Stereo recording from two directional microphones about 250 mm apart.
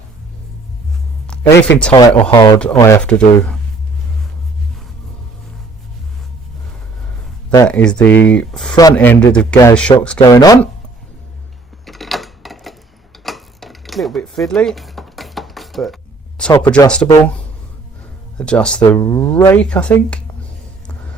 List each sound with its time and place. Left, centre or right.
1.5 s speech: left
1.9 s a man's voice: centre
7.5 s a man's voice: centre
8.0 s speech: left
8.3 s a man's voice: centre
10.2 s speech: centre
11.9 s a sound: centre
16.4 s a man's voice: centre